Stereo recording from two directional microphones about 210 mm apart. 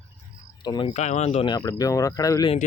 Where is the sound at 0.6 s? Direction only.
20° left (ahead or behind).